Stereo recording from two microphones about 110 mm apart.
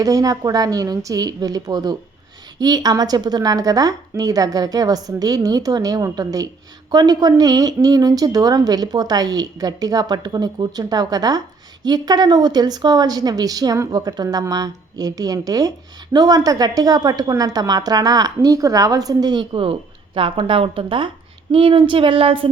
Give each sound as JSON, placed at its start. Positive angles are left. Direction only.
{"t": 0.0, "sound": "a woman's voice", "side_deg": -30}